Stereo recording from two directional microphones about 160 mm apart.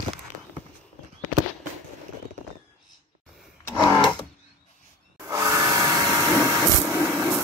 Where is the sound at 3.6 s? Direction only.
20° left (ahead or behind).